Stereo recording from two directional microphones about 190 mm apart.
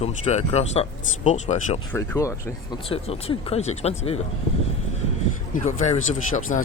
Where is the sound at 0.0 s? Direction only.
35° left (ahead or behind).